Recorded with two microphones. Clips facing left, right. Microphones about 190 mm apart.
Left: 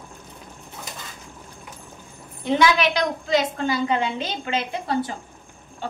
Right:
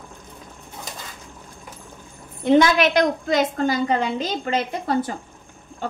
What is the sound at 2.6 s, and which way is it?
A woman's voice, 50° right (ahead or behind).